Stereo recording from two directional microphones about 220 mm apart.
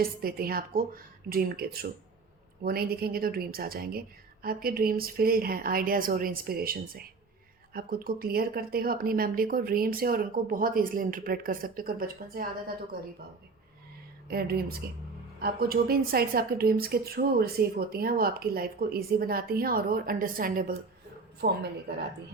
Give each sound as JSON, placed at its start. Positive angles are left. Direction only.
{"t": 0.0, "sound": "a woman's voice", "side_deg": -45}
{"t": 14.3, "sound": "a woman's voice", "side_deg": -45}